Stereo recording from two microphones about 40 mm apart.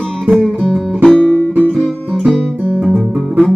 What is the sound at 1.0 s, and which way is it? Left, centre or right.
Music, left.